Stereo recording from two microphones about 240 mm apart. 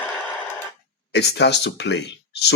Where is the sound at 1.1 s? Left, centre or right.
Left.